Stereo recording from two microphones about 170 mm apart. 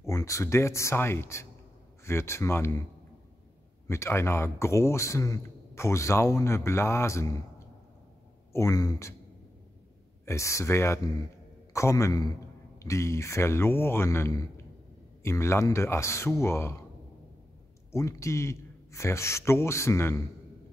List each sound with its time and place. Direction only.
0.0 s a man's voice: 20° left (ahead or behind)
3.8 s a man's voice: 15° left (ahead or behind)
10.2 s a man's voice: 15° left (ahead or behind)
17.9 s a man's voice: 15° left (ahead or behind)